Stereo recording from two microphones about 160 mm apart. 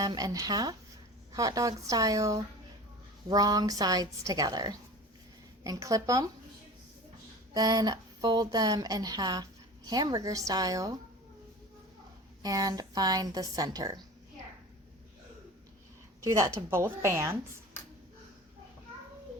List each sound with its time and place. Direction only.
0.0 s speech: 25° right (ahead or behind)
7.5 s speech: 25° right (ahead or behind)
12.4 s speech: 25° right (ahead or behind)
16.2 s a woman's voice: 20° right (ahead or behind)